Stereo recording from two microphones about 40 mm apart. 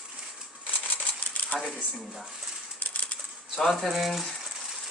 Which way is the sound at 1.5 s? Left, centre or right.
Left.